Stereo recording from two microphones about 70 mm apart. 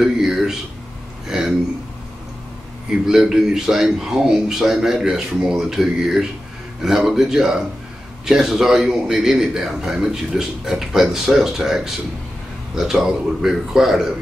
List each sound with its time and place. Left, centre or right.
0.0 s a sound: centre
3.1 s a man's voice: centre
5.4 s speech: centre
5.7 s a man's voice: centre